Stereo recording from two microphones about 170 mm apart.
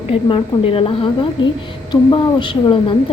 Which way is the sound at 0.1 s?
30° left (ahead or behind).